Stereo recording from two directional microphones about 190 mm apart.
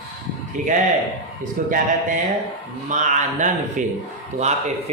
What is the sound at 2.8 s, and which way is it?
A man's voice, 40° right (ahead or behind).